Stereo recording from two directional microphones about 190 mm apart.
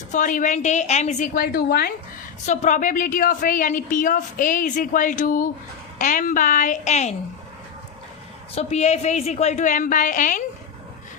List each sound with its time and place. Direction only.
0.1 s a woman's voice: 45° left (ahead or behind)
2.5 s a woman's voice: 40° left (ahead or behind)
8.5 s a woman's voice: 35° left (ahead or behind)